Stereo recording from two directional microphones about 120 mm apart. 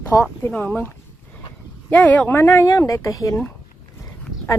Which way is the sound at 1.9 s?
10° left (ahead or behind).